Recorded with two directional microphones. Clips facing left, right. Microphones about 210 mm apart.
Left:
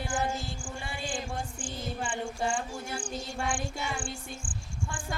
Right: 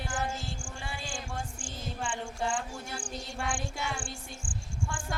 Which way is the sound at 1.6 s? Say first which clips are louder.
Left 3 dB; 15° left (ahead or behind).